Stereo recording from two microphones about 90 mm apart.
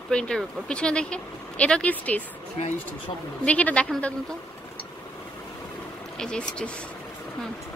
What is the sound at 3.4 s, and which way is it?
Speech, 15° left (ahead or behind).